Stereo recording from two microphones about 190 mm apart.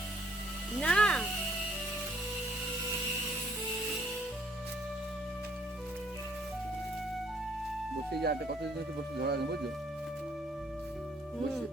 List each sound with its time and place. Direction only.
0.8 s music: 5° left (ahead or behind)
8.2 s speech: 55° right (ahead or behind)